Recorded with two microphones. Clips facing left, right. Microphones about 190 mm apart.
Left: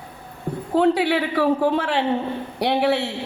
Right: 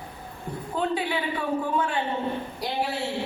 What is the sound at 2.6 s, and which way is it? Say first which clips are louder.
Speech: left 11 dB; 70° left (ahead or behind).